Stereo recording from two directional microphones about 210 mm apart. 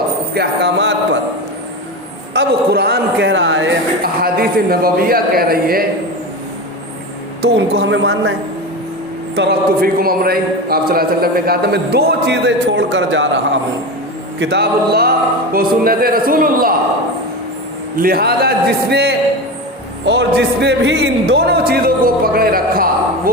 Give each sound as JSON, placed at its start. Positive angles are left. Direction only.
{"t": 0.3, "sound": "a woman's voice", "side_deg": -55}
{"t": 2.3, "sound": "a man's voice", "side_deg": -50}
{"t": 7.4, "sound": "a woman's voice", "side_deg": -55}
{"t": 9.3, "sound": "a man's voice", "side_deg": -50}
{"t": 17.9, "sound": "a man's voice", "side_deg": -45}